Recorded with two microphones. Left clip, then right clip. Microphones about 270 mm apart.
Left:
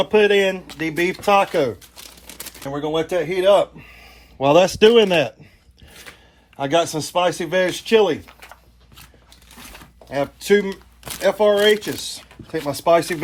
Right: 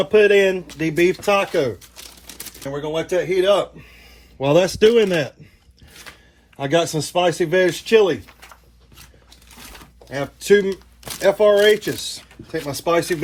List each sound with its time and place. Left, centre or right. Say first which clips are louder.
0.0 s speech: right 2 dB; left
6.6 s speech: even; left
10.1 s speech: right 1 dB; left